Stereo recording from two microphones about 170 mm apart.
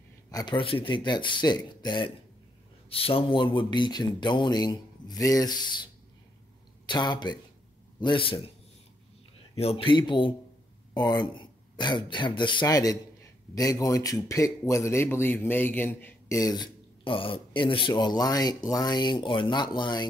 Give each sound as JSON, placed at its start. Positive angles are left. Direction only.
{"t": 0.3, "sound": "speech", "side_deg": 25}
{"t": 6.9, "sound": "a man's voice", "side_deg": 25}
{"t": 9.6, "sound": "speech", "side_deg": 35}